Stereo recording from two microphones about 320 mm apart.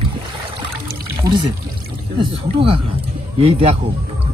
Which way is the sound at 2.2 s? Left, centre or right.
Centre.